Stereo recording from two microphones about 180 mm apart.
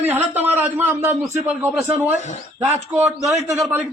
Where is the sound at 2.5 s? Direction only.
10° right (ahead or behind).